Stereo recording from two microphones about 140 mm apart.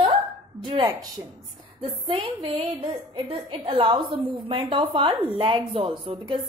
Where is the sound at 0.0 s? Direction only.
40° right (ahead or behind).